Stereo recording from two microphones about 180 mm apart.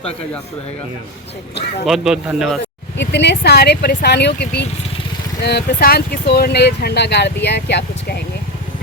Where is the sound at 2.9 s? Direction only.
70° left (ahead or behind).